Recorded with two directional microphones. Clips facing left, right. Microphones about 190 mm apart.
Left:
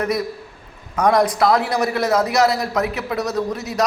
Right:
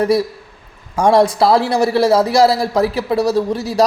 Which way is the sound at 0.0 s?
30° right (ahead or behind).